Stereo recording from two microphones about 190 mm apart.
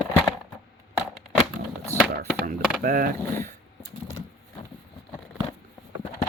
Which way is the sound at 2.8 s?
50° right (ahead or behind).